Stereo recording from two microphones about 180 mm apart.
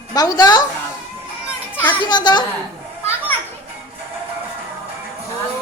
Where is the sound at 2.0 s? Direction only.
25° left (ahead or behind).